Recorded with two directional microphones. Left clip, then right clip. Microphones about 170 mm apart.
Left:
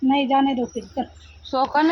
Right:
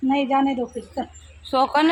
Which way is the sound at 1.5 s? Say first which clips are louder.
Right 1 dB; centre (ahead or behind).